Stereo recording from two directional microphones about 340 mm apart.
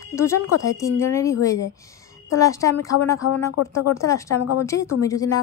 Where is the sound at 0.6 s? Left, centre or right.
Centre.